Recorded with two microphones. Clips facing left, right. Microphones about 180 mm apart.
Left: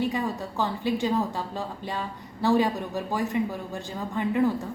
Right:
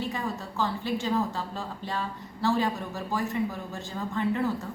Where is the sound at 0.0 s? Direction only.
15° left (ahead or behind).